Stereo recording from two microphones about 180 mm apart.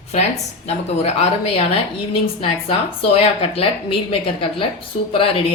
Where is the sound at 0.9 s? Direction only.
35° left (ahead or behind).